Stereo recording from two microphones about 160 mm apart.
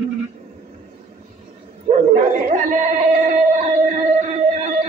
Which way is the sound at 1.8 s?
45° right (ahead or behind).